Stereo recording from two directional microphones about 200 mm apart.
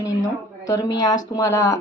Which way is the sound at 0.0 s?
15° left (ahead or behind).